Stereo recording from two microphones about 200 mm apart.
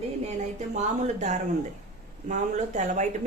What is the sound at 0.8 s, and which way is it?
A woman's voice, 35° right (ahead or behind).